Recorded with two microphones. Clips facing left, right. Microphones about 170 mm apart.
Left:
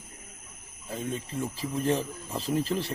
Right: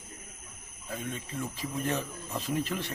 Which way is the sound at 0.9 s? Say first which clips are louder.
Left 4 dB; 30° left (ahead or behind).